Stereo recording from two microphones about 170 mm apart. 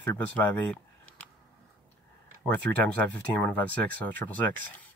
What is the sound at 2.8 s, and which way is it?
Speech, 10° left (ahead or behind).